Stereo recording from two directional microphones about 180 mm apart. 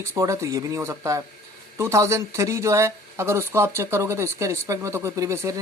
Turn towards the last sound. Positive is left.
turn(degrees=-15)  # may be behind; listen again after turning